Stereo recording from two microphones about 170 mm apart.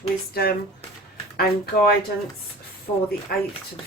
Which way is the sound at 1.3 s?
65° left (ahead or behind).